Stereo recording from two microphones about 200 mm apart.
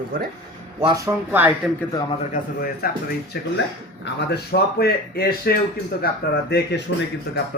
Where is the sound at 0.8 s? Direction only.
20° right (ahead or behind).